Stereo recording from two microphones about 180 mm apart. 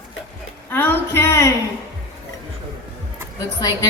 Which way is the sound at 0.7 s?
10° left (ahead or behind).